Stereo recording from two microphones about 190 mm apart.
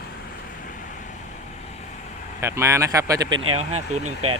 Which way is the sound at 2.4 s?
15° right (ahead or behind).